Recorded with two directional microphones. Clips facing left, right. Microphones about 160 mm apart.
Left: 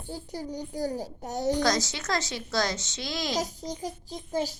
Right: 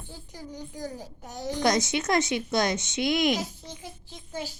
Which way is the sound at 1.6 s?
20° right (ahead or behind).